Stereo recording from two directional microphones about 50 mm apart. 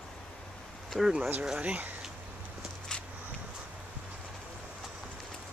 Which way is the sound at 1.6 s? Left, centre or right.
Right.